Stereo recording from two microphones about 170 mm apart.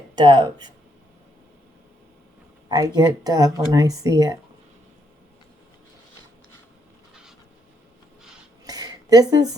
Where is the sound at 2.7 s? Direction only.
25° right (ahead or behind).